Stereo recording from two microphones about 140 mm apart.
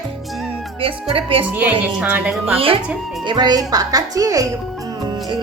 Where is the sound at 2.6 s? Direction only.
40° right (ahead or behind).